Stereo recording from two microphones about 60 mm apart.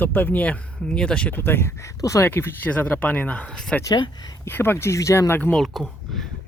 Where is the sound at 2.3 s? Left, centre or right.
Left.